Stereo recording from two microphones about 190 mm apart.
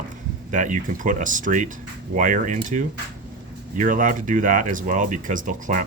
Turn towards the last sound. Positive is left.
turn(degrees=-45)  # may be behind; listen again after turning